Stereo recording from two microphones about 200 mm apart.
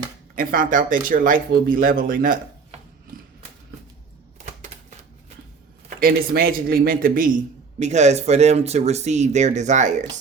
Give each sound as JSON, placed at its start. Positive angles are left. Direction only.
{"t": 0.3, "sound": "speech", "side_deg": -45}
{"t": 3.1, "sound": "a sound", "side_deg": -45}
{"t": 4.4, "sound": "typewriter", "side_deg": -35}
{"t": 6.0, "sound": "speech", "side_deg": -45}
{"t": 7.8, "sound": "speech", "side_deg": -35}